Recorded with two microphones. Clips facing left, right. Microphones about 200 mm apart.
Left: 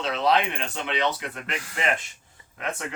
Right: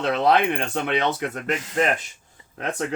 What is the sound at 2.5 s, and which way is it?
Speech, 40° right (ahead or behind).